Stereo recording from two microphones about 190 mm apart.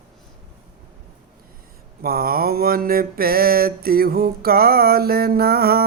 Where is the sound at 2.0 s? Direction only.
50° right (ahead or behind).